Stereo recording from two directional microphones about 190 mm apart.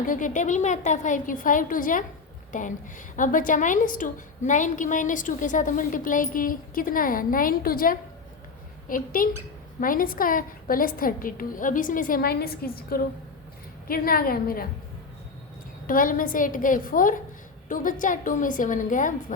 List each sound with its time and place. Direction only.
0.0 s a woman's voice: 45° left (ahead or behind)
15.9 s a woman's voice: 45° left (ahead or behind)